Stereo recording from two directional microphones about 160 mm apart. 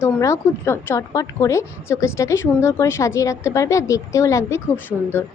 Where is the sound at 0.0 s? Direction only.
15° left (ahead or behind).